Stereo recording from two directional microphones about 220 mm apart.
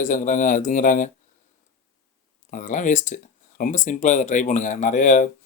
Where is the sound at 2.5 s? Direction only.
35° left (ahead or behind).